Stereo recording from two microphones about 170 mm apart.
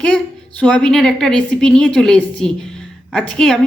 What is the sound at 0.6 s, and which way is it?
A woman's voice, 5° left (ahead or behind).